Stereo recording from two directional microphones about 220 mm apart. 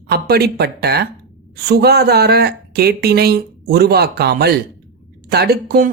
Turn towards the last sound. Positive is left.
turn(degrees=-45)  # may be behind; listen again after turning